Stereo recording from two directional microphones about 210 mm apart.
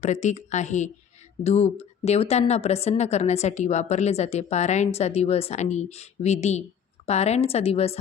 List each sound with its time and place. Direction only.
0.0 s a woman's voice: 35° left (ahead or behind)